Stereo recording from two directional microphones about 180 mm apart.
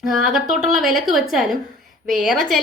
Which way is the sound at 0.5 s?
Centre (ahead or behind).